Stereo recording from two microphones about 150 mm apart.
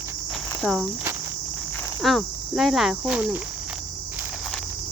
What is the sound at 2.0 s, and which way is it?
Cricket, centre (ahead or behind).